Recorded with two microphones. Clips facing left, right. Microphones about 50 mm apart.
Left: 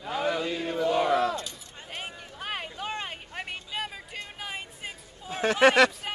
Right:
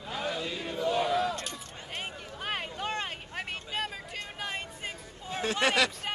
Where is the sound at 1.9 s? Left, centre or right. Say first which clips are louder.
Even; centre.